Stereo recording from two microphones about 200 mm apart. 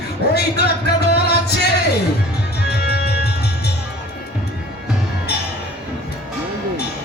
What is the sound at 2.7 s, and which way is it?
Music, 55° left (ahead or behind).